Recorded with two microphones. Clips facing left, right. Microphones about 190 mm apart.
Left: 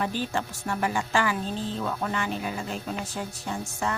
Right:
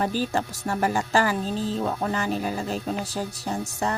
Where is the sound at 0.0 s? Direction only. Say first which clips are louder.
Right 4 dB; 40° right (ahead or behind).